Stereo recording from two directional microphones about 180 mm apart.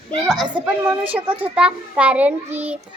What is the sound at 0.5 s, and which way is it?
A child's voice, 5° right (ahead or behind).